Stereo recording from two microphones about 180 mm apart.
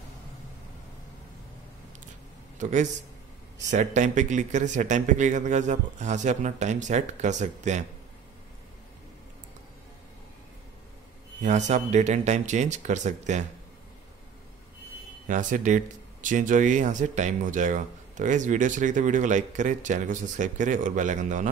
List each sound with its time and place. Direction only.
2.6 s speech: 40° right (ahead or behind)
11.4 s speech: 40° right (ahead or behind)
15.2 s speech: 45° right (ahead or behind)